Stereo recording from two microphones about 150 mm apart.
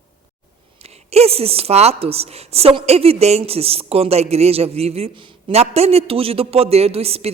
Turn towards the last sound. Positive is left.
turn(degrees=-40)  # may be behind; listen again after turning